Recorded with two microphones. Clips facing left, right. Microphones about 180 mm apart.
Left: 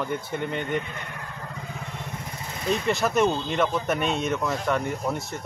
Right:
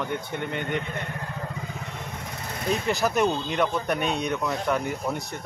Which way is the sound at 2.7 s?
Centre (ahead or behind).